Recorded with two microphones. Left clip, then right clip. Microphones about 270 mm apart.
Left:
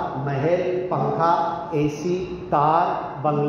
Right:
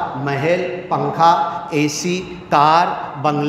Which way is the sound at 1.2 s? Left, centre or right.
Right.